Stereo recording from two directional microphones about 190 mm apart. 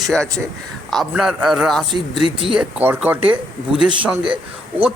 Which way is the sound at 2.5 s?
10° right (ahead or behind).